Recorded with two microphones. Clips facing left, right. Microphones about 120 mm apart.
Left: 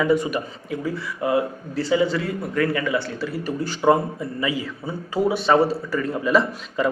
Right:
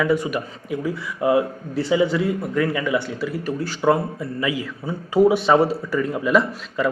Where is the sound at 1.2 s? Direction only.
15° right (ahead or behind).